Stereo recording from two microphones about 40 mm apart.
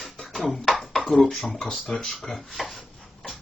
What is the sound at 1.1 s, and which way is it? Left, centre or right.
Speech, centre.